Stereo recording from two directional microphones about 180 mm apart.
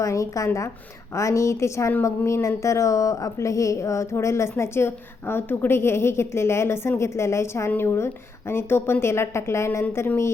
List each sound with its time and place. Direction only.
0.0 s speech: 15° left (ahead or behind)